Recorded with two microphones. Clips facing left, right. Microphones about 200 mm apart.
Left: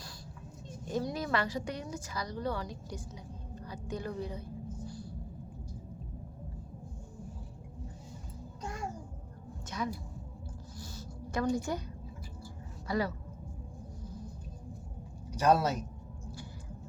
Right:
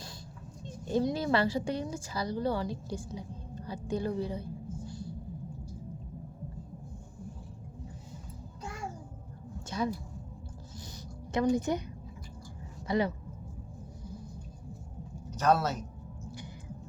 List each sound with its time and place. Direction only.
0.9 s a woman's voice: 30° right (ahead or behind)
4.9 s a sound: 25° right (ahead or behind)
9.6 s a sound: 30° right (ahead or behind)
11.4 s a woman's voice: 20° right (ahead or behind)
12.9 s a woman's voice: 20° right (ahead or behind)
15.3 s a woman's voice: 10° left (ahead or behind)